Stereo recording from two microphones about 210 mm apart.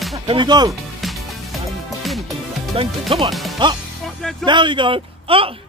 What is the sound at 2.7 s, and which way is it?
Speech, 25° right (ahead or behind).